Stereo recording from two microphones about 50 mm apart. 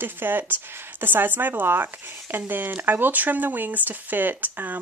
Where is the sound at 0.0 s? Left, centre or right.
Right.